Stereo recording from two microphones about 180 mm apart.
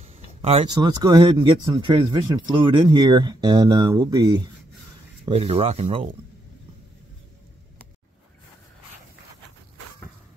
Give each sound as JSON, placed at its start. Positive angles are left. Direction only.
{"t": 0.0, "sound": "a sound", "side_deg": -35}
{"t": 0.7, "sound": "speech", "side_deg": -20}
{"t": 5.3, "sound": "speech", "side_deg": -30}